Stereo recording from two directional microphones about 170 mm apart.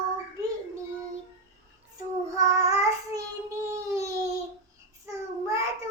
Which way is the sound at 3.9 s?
20° right (ahead or behind).